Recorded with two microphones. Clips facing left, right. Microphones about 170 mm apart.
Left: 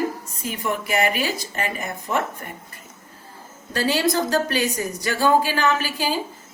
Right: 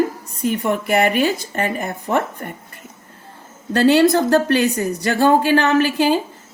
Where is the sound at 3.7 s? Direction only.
65° right (ahead or behind).